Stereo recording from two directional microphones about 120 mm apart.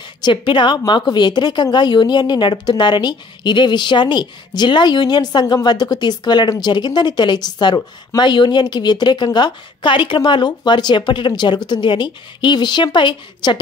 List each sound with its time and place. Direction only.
0.2 s a woman's voice: 40° left (ahead or behind)